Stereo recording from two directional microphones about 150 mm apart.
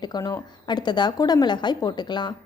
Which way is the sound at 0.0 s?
25° left (ahead or behind).